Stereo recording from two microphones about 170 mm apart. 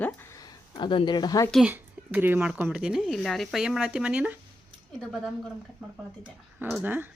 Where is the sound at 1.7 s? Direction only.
10° right (ahead or behind).